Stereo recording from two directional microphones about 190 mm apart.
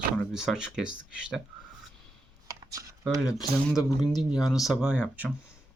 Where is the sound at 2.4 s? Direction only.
15° right (ahead or behind).